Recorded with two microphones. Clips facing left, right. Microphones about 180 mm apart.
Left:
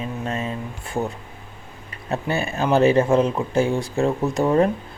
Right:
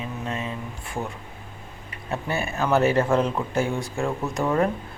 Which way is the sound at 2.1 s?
30° left (ahead or behind).